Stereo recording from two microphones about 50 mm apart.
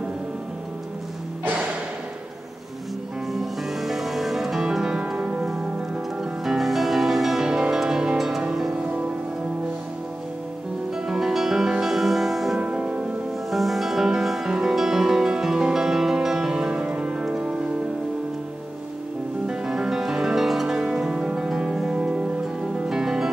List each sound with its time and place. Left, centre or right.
3.3 s music: centre
4.6 s music: centre
6.4 s music: centre
8.7 s music: right
11.1 s music: centre
12.5 s music: centre
13.5 s music: centre
19.4 s music: centre
21.5 s music: centre
22.8 s music: centre